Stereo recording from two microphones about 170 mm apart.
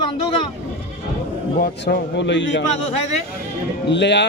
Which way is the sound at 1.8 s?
90° left.